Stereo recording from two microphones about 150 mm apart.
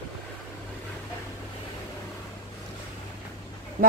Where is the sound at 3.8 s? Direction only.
70° right (ahead or behind).